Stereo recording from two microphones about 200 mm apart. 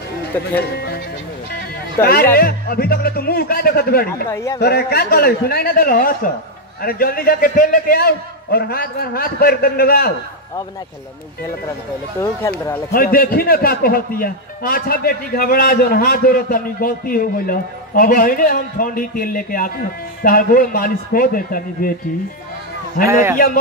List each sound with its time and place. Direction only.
0.6 s music: 55° left (ahead or behind)
2.0 s a man's voice: 50° left (ahead or behind)
4.3 s a man's voice: 15° left (ahead or behind)
4.6 s a man's voice: 55° left (ahead or behind)
12.9 s a man's voice: 45° left (ahead or behind)
23.3 s a man's voice: 45° left (ahead or behind)